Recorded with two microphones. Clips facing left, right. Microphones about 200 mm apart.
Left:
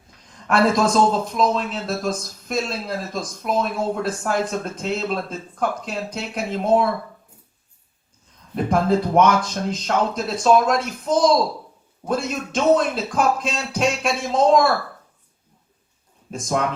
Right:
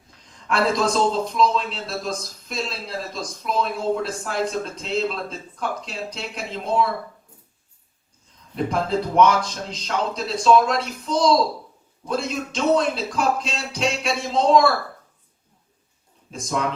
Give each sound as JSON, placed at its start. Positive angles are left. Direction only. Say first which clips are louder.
{"t": 0.4, "sound": "a man's voice", "louder": "left 3 dB", "side_deg": 50}
{"t": 8.5, "sound": "a man's voice", "louder": "left 4 dB", "side_deg": 55}
{"t": 16.3, "sound": "a man's voice", "louder": "left 3 dB", "side_deg": 50}